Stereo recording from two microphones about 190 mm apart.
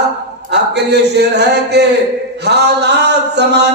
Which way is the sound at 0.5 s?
60° right (ahead or behind).